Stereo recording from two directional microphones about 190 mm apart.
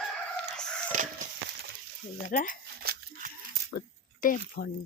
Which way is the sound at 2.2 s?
45° left (ahead or behind).